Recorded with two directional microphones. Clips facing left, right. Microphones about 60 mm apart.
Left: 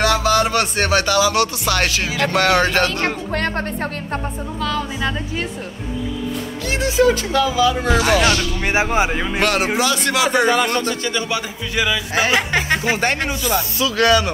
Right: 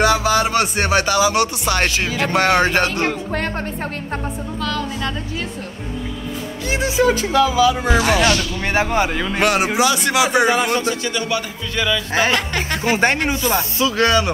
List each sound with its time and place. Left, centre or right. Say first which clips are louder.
0.0 s speech: even; centre
3.0 s speech: even; left
4.6 s a man's voice: left 2 dB; centre
6.7 s speech: left 1 dB; right
8.3 s a man's voice: even; centre
9.4 s speech: right 2 dB; centre
10.5 s speech: even; left
11.1 s speech: even; left
11.7 s a man's voice: even; centre
12.9 s speech: right 3 dB; right